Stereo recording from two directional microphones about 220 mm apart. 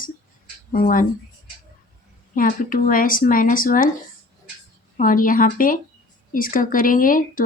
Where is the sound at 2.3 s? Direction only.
40° left (ahead or behind).